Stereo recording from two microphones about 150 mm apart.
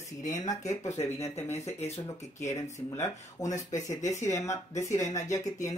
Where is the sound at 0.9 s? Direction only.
45° left (ahead or behind).